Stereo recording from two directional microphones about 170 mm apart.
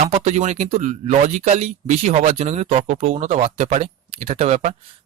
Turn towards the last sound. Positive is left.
turn(degrees=-40)  # may be behind; listen again after turning